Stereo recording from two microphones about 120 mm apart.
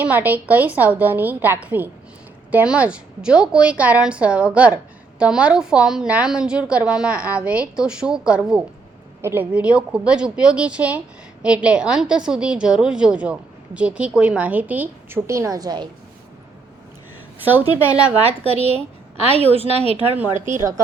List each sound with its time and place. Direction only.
0.0 s a woman's voice: 15° right (ahead or behind)
15.3 s a woman's voice: 25° right (ahead or behind)
18.2 s a woman's voice: 55° right (ahead or behind)
20.6 s speech: 25° right (ahead or behind)